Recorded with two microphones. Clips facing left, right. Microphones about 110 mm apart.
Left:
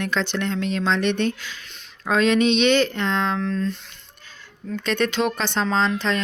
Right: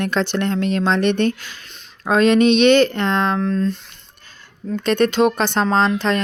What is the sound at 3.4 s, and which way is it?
Speech, 40° right (ahead or behind).